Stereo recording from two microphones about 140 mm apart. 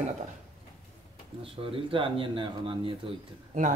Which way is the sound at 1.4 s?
40° right (ahead or behind).